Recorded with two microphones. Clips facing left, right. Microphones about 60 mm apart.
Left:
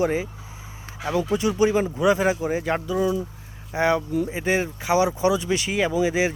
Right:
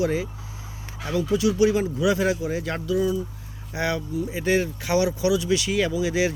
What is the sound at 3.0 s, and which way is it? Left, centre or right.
Speech, left.